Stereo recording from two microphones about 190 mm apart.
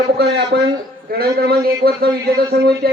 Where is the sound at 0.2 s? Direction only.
65° right (ahead or behind).